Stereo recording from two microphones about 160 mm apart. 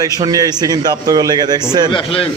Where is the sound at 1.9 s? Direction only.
35° left (ahead or behind).